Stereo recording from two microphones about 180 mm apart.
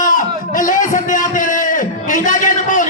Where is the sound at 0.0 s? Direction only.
45° left (ahead or behind).